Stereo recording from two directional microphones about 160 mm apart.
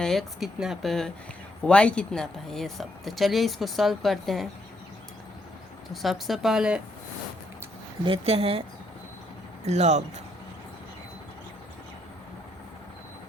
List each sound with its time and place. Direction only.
0.0 s speech: centre (ahead or behind)
5.9 s speech: centre (ahead or behind)
8.0 s speech: 35° right (ahead or behind)
9.6 s speech: 45° right (ahead or behind)